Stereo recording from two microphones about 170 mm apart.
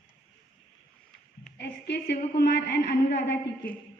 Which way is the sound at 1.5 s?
80° left.